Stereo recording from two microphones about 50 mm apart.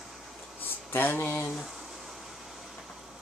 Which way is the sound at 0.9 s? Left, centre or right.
Left.